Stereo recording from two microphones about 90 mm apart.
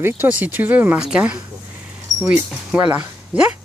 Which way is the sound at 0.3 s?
15° right (ahead or behind).